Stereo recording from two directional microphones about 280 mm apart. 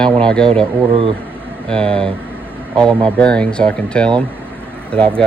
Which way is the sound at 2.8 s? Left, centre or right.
Centre.